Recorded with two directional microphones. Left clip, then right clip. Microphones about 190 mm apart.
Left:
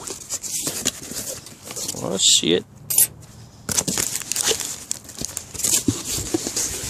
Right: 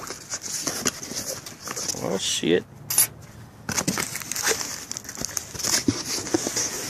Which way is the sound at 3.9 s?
30° left (ahead or behind).